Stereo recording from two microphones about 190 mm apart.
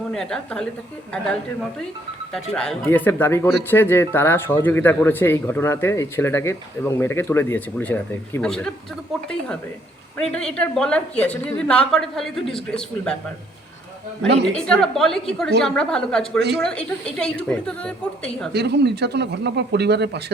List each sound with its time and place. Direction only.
0.1 s a woman's voice: 5° left (ahead or behind)
2.3 s a woman's voice: 5° left (ahead or behind)
10.2 s a woman's voice: 5° left (ahead or behind)
14.4 s a woman's voice: 5° left (ahead or behind)
18.5 s speech: 60° right (ahead or behind)